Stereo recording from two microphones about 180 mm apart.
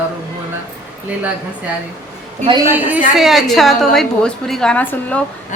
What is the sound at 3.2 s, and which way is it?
A woman's voice, centre (ahead or behind).